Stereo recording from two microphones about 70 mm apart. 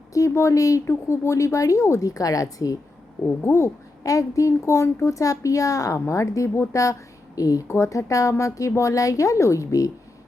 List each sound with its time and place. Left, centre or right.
0.1 s speech: left
1.0 s speech: left
3.2 s speech: left
4.0 s speech: left